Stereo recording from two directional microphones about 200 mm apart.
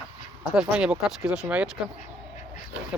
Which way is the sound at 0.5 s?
5° right (ahead or behind).